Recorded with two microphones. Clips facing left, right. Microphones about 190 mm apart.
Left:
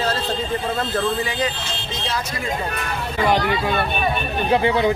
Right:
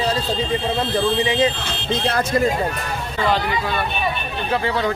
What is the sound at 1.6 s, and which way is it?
Speech, 60° right (ahead or behind).